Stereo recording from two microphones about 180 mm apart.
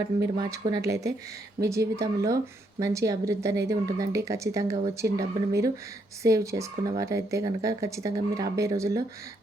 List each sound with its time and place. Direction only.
0.6 s speech: 20° right (ahead or behind)